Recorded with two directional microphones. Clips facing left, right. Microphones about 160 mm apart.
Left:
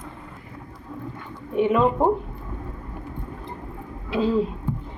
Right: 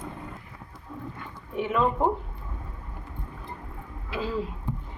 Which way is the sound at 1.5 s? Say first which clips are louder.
Left 6 dB; 20° left (ahead or behind).